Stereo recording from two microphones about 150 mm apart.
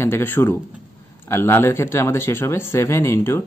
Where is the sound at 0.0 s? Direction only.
15° left (ahead or behind).